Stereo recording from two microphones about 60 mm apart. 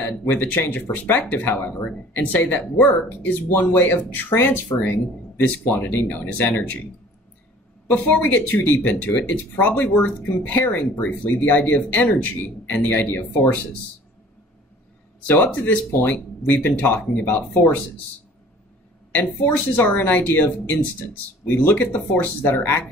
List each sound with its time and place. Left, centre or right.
0.0 s speech: left
5.7 s speech: left
7.9 s speech: left
15.2 s speech: left
19.1 s speech: left